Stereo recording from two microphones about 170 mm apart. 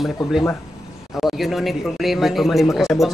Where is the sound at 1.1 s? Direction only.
Centre (ahead or behind).